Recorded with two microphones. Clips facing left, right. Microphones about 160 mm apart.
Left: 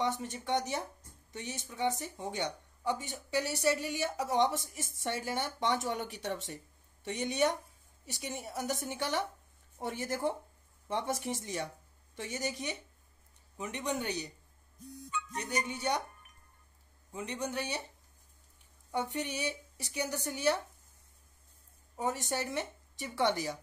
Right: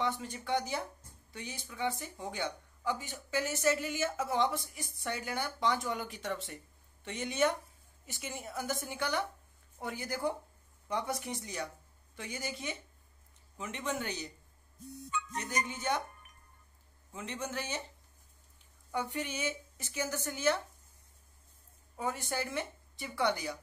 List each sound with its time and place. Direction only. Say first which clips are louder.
0.0 s a woman's voice: left 1 dB; 20° left (ahead or behind)
15.4 s a woman's voice: left 2 dB; 15° left (ahead or behind)
17.1 s a woman's voice: left 2 dB; 15° left (ahead or behind)
18.9 s a woman's voice: left 1 dB; 20° left (ahead or behind)
21.9 s a woman's voice: left 2 dB; 20° left (ahead or behind)